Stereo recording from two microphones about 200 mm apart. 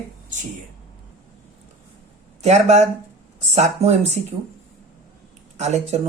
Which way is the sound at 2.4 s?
35° right (ahead or behind).